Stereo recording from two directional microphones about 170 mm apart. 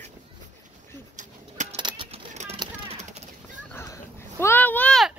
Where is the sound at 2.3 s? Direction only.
45° right (ahead or behind).